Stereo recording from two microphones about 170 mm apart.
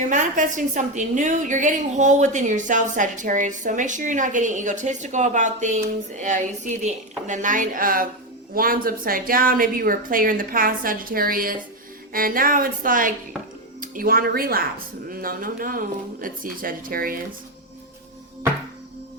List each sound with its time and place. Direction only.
0.0 s a woman's voice: 50° right (ahead or behind)